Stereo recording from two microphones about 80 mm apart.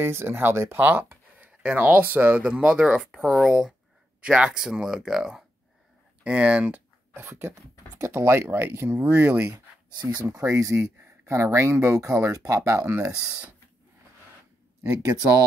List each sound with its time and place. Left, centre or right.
0.0 s speech: right; by 6.8 s centre
7.2 s speech: right
9.5 s speech: right